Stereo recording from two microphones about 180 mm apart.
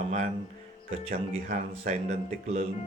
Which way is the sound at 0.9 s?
45° right (ahead or behind).